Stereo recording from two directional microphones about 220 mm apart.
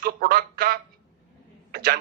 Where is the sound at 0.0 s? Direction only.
45° right (ahead or behind).